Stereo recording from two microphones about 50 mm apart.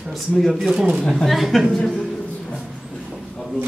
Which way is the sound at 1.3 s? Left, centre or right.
Centre.